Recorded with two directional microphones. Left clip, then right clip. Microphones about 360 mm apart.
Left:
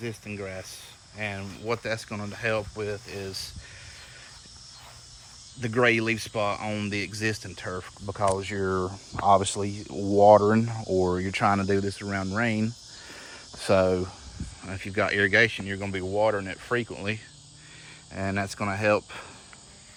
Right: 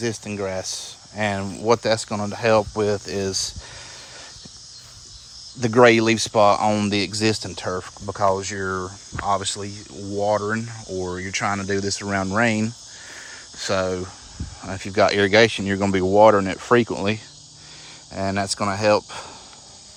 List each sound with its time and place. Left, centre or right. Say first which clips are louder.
0.0 s speech: right 9 dB; centre
5.5 s speech: right 9 dB; centre
13.1 s a sound: right 7 dB; centre
14.6 s speech: right 9 dB; centre